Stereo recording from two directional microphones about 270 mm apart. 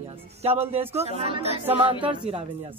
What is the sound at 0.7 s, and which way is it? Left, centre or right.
Speech, right.